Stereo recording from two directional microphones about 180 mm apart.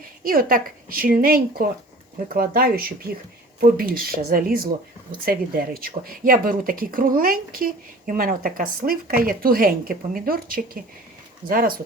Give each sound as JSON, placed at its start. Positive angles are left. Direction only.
{"t": 0.2, "sound": "speech", "side_deg": -55}